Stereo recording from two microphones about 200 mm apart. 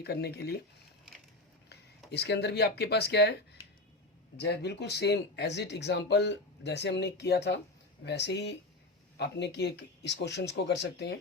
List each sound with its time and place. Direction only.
0.0 s speech: 55° left (ahead or behind)
2.0 s speech: 55° left (ahead or behind)